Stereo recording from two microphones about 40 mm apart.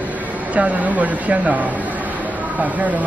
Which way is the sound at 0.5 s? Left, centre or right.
Right.